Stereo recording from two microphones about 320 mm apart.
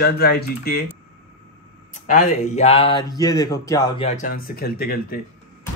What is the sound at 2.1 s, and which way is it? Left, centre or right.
Speech, left.